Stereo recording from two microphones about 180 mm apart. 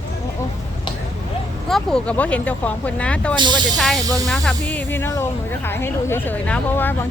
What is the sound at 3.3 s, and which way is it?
Speech, 25° right (ahead or behind).